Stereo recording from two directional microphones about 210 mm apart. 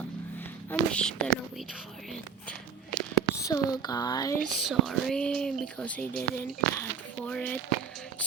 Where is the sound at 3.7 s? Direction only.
20° left (ahead or behind).